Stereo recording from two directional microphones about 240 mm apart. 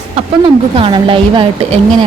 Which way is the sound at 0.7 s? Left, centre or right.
Right.